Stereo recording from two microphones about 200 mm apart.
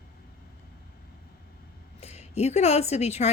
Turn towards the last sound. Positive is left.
turn(degrees=35)  # may be behind; listen again after turning